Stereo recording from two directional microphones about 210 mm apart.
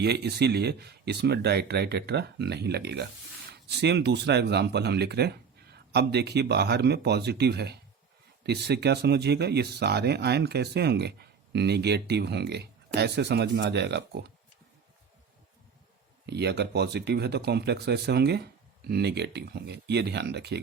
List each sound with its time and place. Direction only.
0.0 s speech: 50° right (ahead or behind)
16.2 s speech: 50° right (ahead or behind)